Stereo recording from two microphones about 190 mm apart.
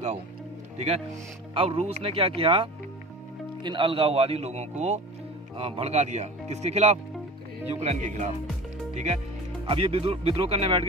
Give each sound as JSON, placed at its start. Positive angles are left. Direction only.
{"t": 0.7, "sound": "a man's voice", "side_deg": -35}